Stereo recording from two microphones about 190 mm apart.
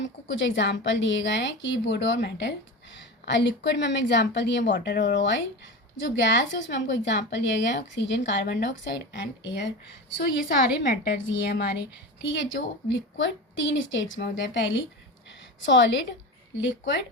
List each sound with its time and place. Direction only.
0.3 s a woman's voice: 75° left (ahead or behind)
10.8 s a woman's voice: 55° left (ahead or behind)
12.2 s a woman's voice: 75° left (ahead or behind)